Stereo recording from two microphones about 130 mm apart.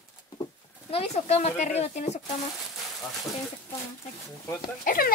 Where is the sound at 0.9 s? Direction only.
55° left (ahead or behind).